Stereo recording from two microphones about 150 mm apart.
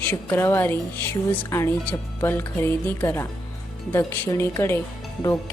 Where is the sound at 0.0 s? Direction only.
15° left (ahead or behind).